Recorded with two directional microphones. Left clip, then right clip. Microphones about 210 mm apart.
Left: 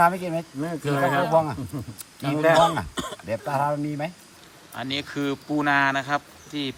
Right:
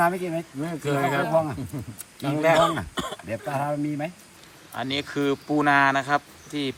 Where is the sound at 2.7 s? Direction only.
10° left (ahead or behind).